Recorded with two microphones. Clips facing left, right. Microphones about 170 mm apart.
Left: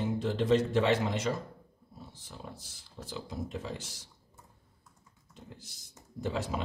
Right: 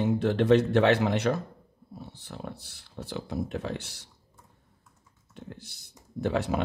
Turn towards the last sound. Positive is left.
turn(degrees=-65)  # may be behind; listen again after turning